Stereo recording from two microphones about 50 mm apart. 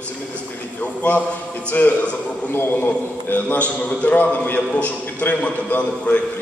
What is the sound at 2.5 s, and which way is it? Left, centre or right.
A man's voice, left.